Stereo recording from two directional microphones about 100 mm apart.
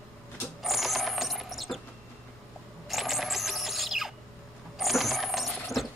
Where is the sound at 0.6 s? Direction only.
Centre (ahead or behind).